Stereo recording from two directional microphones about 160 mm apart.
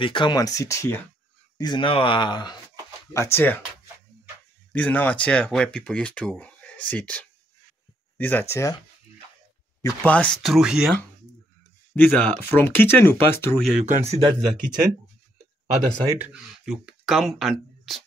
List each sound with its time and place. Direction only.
0.0 s speech: 30° left (ahead or behind)
1.6 s speech: 30° left (ahead or behind)
3.1 s speech: 15° left (ahead or behind)
4.7 s speech: 10° left (ahead or behind)
9.8 s speech: 15° left (ahead or behind); by 11.0 s 5° right (ahead or behind)
11.9 s speech: 10° left (ahead or behind)
13.8 s a man's voice: 40° right (ahead or behind)
16.1 s speech: 10° right (ahead or behind)